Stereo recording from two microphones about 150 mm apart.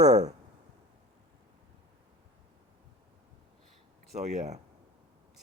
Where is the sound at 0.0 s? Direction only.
50° right (ahead or behind).